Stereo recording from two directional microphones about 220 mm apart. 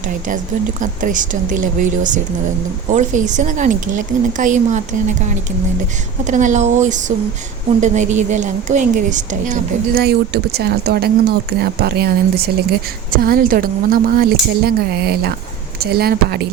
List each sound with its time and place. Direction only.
0.8 s a woman's voice: 35° right (ahead or behind)
6.2 s a woman's voice: 35° right (ahead or behind)
10.0 s speech: 45° right (ahead or behind)